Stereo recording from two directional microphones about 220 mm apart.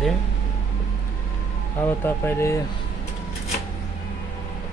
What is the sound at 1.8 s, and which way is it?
Speech, 10° left (ahead or behind).